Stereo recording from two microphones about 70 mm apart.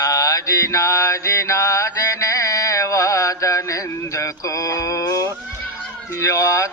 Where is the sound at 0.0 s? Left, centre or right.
Left.